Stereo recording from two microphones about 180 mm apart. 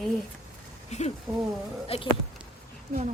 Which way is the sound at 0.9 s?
40° left (ahead or behind).